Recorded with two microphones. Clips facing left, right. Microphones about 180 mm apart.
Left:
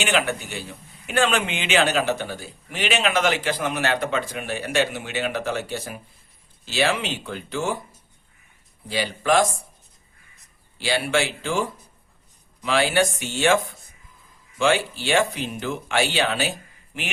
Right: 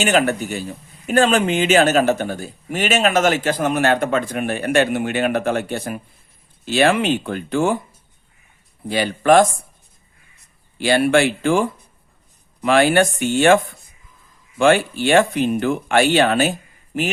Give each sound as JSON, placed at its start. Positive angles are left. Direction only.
{"t": 0.0, "sound": "a man's voice", "side_deg": -40}
{"t": 8.9, "sound": "speech", "side_deg": -55}
{"t": 10.8, "sound": "speech", "side_deg": -55}